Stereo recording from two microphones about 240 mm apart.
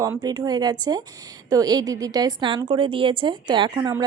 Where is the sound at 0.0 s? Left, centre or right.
Centre.